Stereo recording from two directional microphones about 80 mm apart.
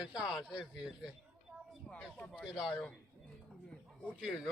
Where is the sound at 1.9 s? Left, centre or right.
Centre.